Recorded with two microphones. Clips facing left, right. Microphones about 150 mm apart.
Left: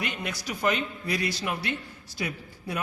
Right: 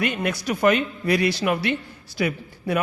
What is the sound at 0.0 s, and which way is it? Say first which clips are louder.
A man's voice: right 9 dB; 60° right (ahead or behind).